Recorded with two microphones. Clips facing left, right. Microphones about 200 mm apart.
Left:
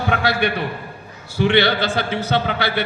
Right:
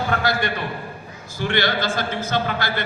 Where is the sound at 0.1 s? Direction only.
70° left (ahead or behind).